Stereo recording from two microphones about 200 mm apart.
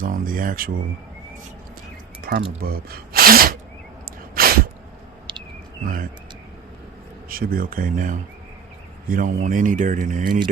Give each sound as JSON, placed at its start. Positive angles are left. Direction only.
{"t": 0.0, "sound": "speech", "side_deg": -45}
{"t": 2.2, "sound": "a sound", "side_deg": -50}
{"t": 2.6, "sound": "speech", "side_deg": -50}
{"t": 4.4, "sound": "sneeze", "side_deg": -45}
{"t": 5.3, "sound": "cricket", "side_deg": -25}
{"t": 5.8, "sound": "speech", "side_deg": -45}
{"t": 7.3, "sound": "speech", "side_deg": -45}